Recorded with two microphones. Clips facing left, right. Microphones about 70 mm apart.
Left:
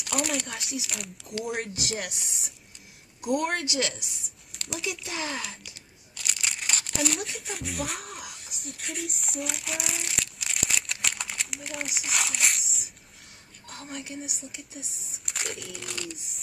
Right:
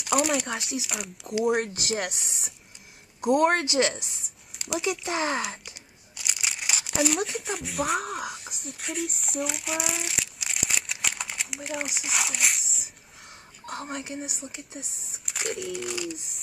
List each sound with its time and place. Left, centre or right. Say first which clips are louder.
0.0 s a sound: right 5 dB; centre
0.6 s speech: right 3 dB; centre
1.5 s a woman's voice: right 6 dB; right
6.1 s crumpling: even; centre
7.2 s speech: right 3 dB; centre
9.2 s crumpling: right 3 dB; centre
12.0 s speech: left 3 dB; centre
13.7 s a woman's voice: right 5 dB; right
15.2 s speech: right 5 dB; centre